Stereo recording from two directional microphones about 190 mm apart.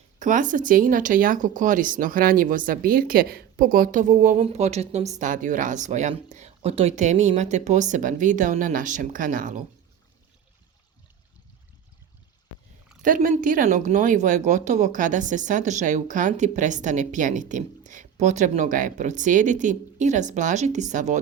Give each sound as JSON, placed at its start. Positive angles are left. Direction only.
{"t": 0.2, "sound": "speech", "side_deg": -40}
{"t": 13.0, "sound": "speech", "side_deg": -40}